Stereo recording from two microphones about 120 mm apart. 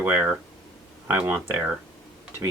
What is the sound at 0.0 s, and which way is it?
Speech, 15° right (ahead or behind).